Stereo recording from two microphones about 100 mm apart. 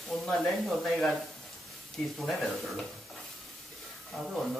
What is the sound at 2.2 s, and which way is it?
Speech, centre (ahead or behind).